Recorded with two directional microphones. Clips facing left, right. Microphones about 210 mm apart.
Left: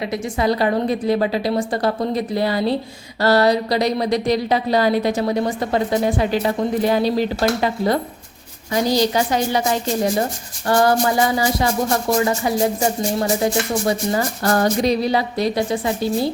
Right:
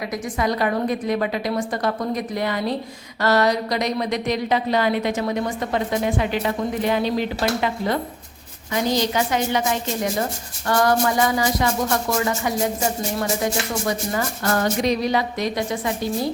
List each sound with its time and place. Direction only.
0.1 s speech: 30° left (ahead or behind)
13.1 s speech: 30° left (ahead or behind)